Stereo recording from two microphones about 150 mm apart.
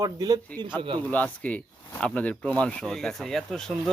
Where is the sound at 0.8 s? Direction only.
35° right (ahead or behind).